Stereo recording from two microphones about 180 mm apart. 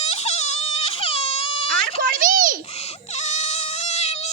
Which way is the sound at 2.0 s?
50° right (ahead or behind).